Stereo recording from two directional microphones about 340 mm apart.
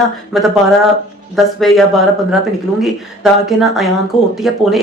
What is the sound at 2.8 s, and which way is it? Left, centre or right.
Speech, centre.